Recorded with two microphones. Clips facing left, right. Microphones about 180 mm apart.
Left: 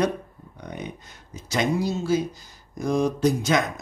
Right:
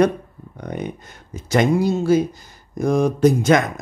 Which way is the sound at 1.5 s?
55° right (ahead or behind).